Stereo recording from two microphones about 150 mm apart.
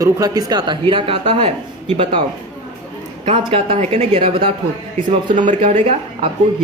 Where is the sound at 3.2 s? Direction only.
40° right (ahead or behind).